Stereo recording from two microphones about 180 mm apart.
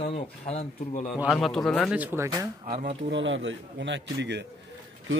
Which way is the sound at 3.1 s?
90° right.